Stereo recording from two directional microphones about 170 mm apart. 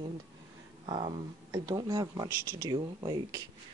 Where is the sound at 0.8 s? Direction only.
35° right (ahead or behind).